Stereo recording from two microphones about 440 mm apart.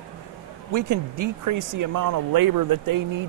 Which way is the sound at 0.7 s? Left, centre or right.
Right.